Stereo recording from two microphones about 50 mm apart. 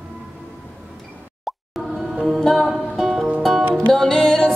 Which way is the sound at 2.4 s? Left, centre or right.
Centre.